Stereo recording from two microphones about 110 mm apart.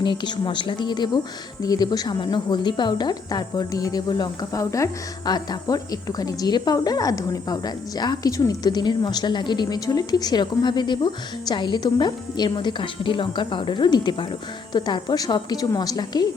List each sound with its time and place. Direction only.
0.0 s speech: 45° left (ahead or behind)